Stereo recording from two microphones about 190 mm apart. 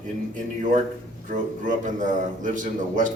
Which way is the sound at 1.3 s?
45° right (ahead or behind).